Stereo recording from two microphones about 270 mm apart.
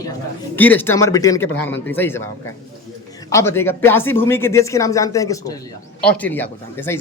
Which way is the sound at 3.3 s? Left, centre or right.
Centre.